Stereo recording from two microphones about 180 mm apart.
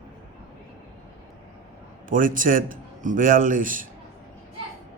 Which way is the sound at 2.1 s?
50° right (ahead or behind).